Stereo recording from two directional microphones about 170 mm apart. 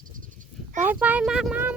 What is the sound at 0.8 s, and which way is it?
Speech, 10° right (ahead or behind).